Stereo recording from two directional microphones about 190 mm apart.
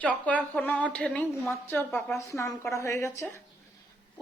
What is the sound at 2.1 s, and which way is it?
Speech, 15° left (ahead or behind).